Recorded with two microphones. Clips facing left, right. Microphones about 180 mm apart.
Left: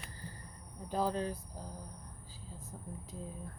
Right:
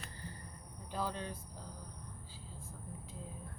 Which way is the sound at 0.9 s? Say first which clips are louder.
Left 6 dB; 40° left (ahead or behind).